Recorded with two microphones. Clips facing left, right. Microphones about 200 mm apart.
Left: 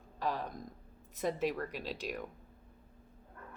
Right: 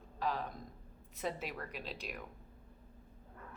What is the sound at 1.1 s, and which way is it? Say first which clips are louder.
Speech: left 7 dB; 45° left (ahead or behind).